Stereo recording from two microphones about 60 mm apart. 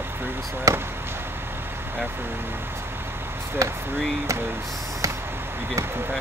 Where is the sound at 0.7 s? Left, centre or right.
Right.